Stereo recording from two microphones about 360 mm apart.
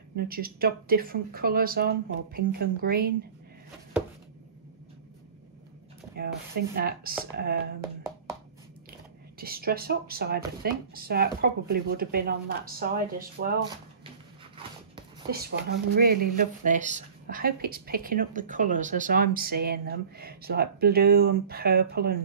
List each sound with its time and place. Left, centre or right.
0.1 s a woman's voice: right
6.1 s a woman's voice: right
9.4 s a woman's voice: right
15.9 s a woman's voice: right